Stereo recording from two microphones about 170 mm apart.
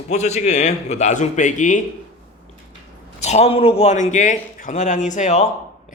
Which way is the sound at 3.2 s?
40° left (ahead or behind).